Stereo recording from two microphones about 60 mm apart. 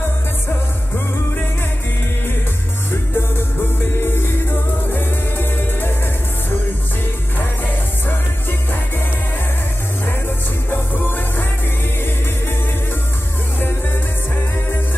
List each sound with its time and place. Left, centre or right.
2.9 s music: left
7.3 s music: left
10.7 s music: left